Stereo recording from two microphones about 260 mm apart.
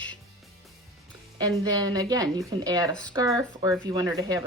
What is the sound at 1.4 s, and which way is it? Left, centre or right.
A woman's voice, centre.